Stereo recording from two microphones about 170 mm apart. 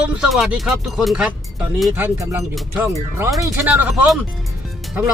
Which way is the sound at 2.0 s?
15° right (ahead or behind).